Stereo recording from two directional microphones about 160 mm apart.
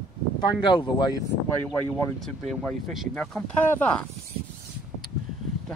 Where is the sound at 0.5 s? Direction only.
30° left (ahead or behind).